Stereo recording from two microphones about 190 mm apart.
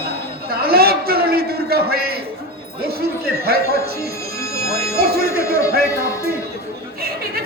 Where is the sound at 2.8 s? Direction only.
55° right (ahead or behind).